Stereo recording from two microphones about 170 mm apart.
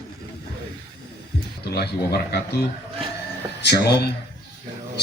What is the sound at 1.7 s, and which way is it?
Speech, 70° left (ahead or behind).